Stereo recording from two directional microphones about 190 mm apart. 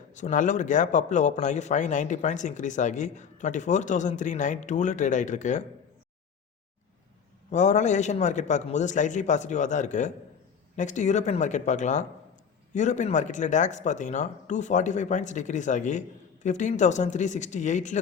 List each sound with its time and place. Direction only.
0.1 s a man's voice: 40° left (ahead or behind)
7.5 s a man's voice: 40° left (ahead or behind)